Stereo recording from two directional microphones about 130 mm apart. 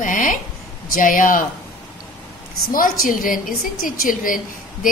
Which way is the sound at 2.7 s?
90° left.